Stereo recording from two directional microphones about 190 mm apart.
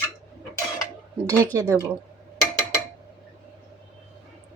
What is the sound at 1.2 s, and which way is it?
Speech, 20° right (ahead or behind).